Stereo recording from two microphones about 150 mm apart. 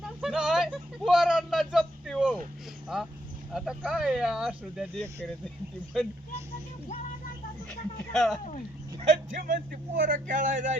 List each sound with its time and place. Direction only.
0.2 s a sound: 5° right (ahead or behind)
2.9 s vehicle: centre (ahead or behind)
3.5 s speech: 5° right (ahead or behind)
7.7 s speech: centre (ahead or behind)
9.0 s speech: 50° right (ahead or behind)
9.4 s speech: 65° right (ahead or behind)